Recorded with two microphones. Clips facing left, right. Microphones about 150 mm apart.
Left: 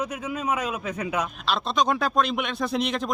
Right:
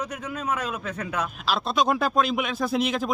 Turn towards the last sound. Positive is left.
turn(degrees=0)  # may be behind; listen again after turning